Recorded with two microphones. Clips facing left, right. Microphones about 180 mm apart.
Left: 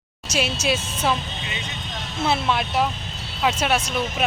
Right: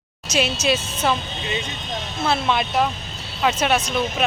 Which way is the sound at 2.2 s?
5° left (ahead or behind).